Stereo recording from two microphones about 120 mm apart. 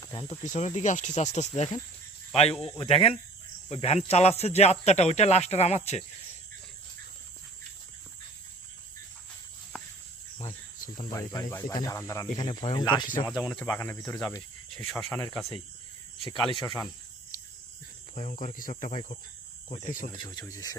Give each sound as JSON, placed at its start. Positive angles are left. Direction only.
{"t": 0.0, "sound": "snake", "side_deg": 30}
{"t": 0.3, "sound": "speech", "side_deg": 80}
{"t": 2.3, "sound": "speech", "side_deg": 55}
{"t": 11.1, "sound": "speech", "side_deg": 25}
{"t": 12.7, "sound": "speech", "side_deg": 35}
{"t": 13.5, "sound": "speech", "side_deg": 10}
{"t": 13.7, "sound": "speech", "side_deg": 20}
{"t": 16.2, "sound": "speech", "side_deg": 45}
{"t": 17.3, "sound": "a sound", "side_deg": 90}
{"t": 18.1, "sound": "speech", "side_deg": 80}
{"t": 19.6, "sound": "speech", "side_deg": 90}
{"t": 20.2, "sound": "speech", "side_deg": 25}